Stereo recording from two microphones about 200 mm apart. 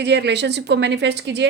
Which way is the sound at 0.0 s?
60° right (ahead or behind).